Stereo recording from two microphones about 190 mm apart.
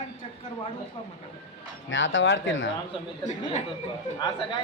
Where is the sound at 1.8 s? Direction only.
90° left.